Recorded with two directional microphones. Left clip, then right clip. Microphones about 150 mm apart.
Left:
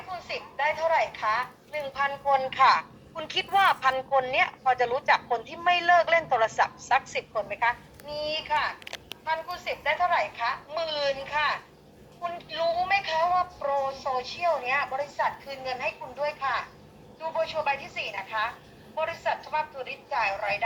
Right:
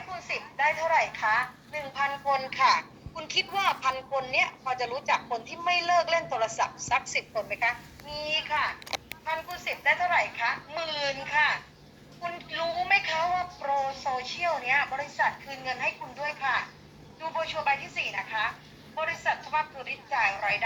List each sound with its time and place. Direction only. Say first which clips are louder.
0.1 s a woman's voice: even; 15° right (ahead or behind)
2.2 s speech: left 4 dB; 15° left (ahead or behind)
2.7 s a woman's voice: left 1 dB; 35° left (ahead or behind); by 7.7 s 20° left (ahead or behind)
8.0 s speech: even; centre (ahead or behind)
9.2 s speech: left 4 dB; 10° right (ahead or behind)